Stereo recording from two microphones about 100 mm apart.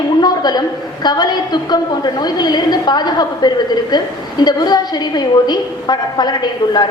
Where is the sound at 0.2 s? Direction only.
45° left (ahead or behind).